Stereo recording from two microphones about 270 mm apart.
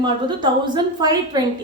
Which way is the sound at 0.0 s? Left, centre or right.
Centre.